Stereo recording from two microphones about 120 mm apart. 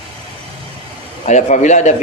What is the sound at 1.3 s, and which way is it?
Speech, 80° left.